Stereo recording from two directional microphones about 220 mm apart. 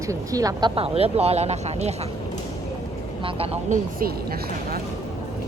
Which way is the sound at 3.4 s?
35° right (ahead or behind).